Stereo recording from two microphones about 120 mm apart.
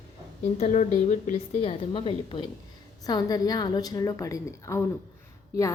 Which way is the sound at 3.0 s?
30° left (ahead or behind).